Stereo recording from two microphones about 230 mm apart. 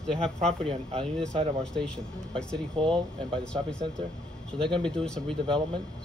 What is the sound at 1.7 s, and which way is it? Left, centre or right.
Speech, centre.